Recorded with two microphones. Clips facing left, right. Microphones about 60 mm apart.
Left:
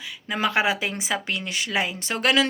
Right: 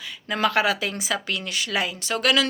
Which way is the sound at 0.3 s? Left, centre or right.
Centre.